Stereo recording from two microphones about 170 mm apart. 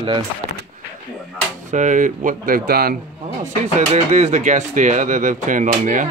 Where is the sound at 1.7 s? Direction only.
50° right (ahead or behind).